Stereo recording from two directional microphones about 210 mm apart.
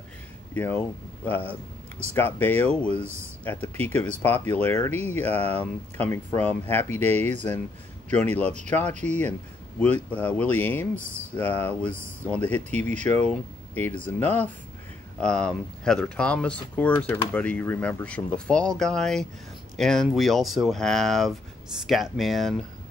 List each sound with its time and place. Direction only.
0.6 s speech: 10° left (ahead or behind)
8.9 s speech: 35° right (ahead or behind)
9.8 s speech: 5° left (ahead or behind)